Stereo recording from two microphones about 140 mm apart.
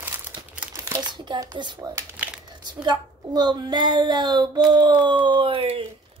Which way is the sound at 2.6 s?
30° right (ahead or behind).